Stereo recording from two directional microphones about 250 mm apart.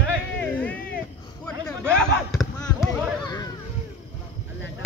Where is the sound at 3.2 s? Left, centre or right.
Centre.